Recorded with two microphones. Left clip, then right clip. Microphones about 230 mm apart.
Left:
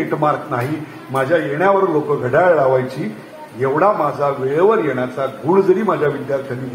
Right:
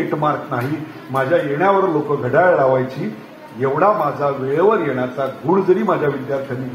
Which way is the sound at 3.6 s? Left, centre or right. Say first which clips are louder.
Left 1 dB; left.